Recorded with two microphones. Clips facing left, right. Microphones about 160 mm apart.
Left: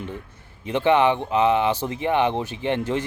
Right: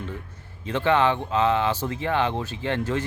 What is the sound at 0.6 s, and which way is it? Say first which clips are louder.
Speech: left 3 dB; 15° left (ahead or behind).